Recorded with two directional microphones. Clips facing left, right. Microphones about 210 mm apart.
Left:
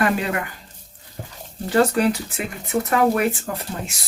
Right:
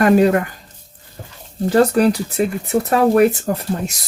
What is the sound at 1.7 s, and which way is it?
Speech, 35° right (ahead or behind).